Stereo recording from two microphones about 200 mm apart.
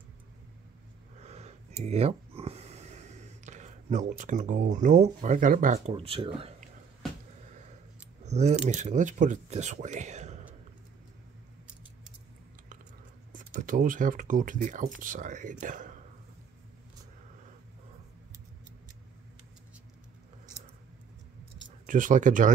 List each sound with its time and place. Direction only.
1.2 s a sound: 35° right (ahead or behind)
8.2 s speech: 35° right (ahead or behind)
13.3 s speech: 40° right (ahead or behind)
21.6 s speech: 40° right (ahead or behind)